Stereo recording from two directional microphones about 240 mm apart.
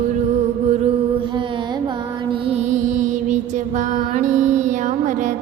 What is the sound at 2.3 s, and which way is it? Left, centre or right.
Music, right.